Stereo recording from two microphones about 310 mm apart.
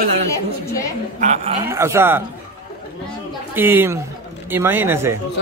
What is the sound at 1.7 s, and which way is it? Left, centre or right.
Speech, centre.